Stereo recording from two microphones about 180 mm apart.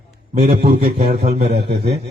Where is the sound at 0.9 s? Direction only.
35° right (ahead or behind).